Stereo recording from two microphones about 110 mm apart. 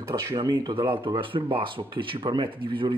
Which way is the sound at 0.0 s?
30° right (ahead or behind).